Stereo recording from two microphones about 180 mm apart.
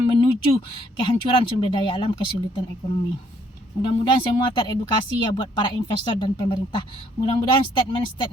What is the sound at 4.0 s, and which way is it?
Speech, 30° left (ahead or behind).